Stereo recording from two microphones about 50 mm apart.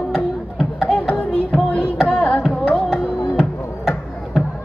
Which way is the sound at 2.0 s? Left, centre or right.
Left.